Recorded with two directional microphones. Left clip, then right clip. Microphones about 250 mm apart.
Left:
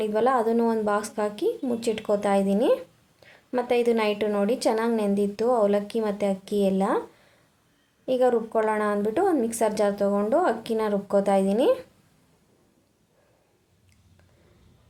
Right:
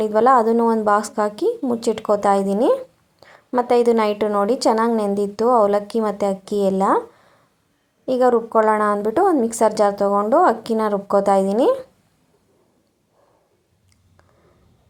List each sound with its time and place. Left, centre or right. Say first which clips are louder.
0.0 s a woman's voice: right 8 dB; centre
8.0 s a woman's voice: right 6 dB; centre